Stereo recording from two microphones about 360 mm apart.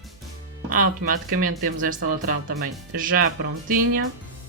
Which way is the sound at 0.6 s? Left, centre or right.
Right.